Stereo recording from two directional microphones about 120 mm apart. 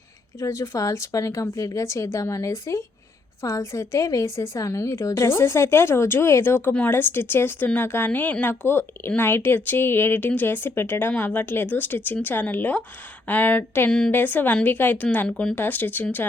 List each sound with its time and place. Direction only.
0.3 s a woman's voice: 25° left (ahead or behind); by 15.5 s 5° left (ahead or behind)
15.5 s a woman's voice: 15° left (ahead or behind)